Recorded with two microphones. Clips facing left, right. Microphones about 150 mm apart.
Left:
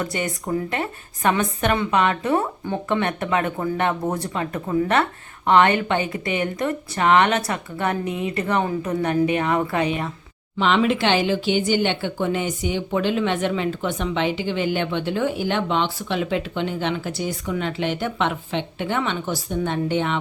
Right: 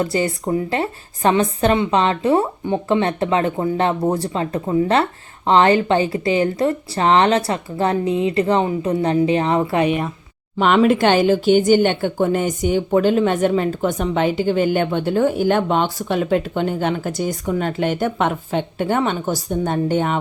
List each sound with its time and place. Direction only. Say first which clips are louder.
0.0 s a woman's voice: right 6 dB; 30° right (ahead or behind)
10.8 s speech: right 7 dB; 50° right (ahead or behind)